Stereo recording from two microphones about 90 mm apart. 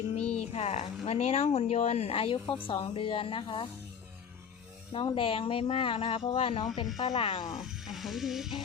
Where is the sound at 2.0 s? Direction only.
90° left.